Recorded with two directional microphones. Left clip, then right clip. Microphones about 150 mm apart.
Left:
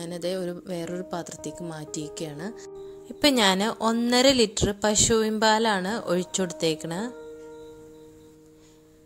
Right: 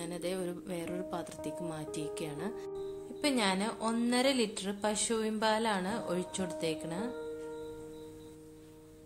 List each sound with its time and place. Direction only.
0.0 s speech: 40° left (ahead or behind)
3.2 s a woman's voice: 60° left (ahead or behind)